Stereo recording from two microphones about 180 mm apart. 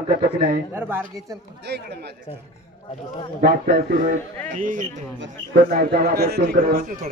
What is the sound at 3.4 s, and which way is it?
Speech, 60° right (ahead or behind).